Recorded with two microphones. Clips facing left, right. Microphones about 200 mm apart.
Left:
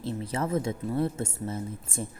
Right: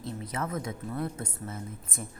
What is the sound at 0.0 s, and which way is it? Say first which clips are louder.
A woman's voice: left 4 dB; 30° left (ahead or behind).